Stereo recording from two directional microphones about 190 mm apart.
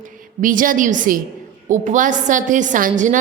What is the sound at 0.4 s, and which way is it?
A woman's voice, 45° right (ahead or behind).